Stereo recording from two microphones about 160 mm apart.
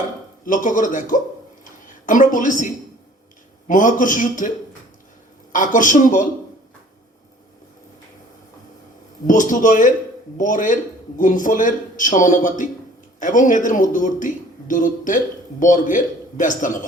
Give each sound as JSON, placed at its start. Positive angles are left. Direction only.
{"t": 0.4, "sound": "a man's voice", "side_deg": 55}
{"t": 3.7, "sound": "a man's voice", "side_deg": 55}
{"t": 9.2, "sound": "a man's voice", "side_deg": 55}